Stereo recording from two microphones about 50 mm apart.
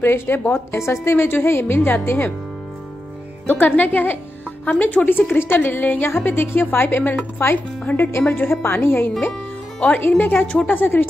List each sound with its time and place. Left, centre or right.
0.0 s a woman's voice: left
1.1 s a woman's voice: left
3.4 s a woman's voice: left
8.5 s a woman's voice: left
10.3 s speech: left
10.7 s speech: left